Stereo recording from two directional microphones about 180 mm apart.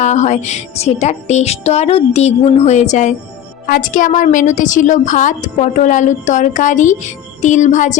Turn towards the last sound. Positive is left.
turn(degrees=45)  # may be behind; listen again after turning